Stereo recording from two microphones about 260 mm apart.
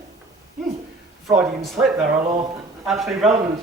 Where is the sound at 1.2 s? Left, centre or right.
Centre.